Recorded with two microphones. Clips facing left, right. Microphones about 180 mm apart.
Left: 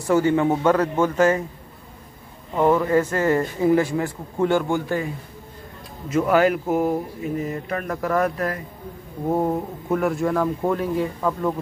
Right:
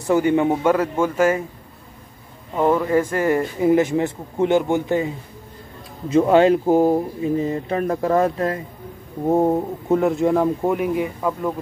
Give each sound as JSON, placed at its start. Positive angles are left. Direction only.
{"t": 0.0, "sound": "a man's voice", "side_deg": -20}
{"t": 2.5, "sound": "speech", "side_deg": -5}